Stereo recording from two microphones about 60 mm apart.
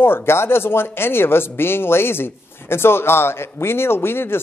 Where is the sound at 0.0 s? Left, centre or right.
Left.